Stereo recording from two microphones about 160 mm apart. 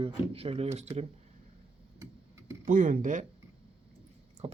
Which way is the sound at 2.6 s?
55° right (ahead or behind).